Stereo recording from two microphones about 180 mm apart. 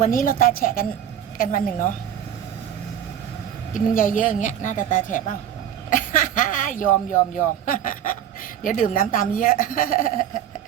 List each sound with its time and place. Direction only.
0.0 s speech: 50° left (ahead or behind)
3.8 s speech: 45° left (ahead or behind)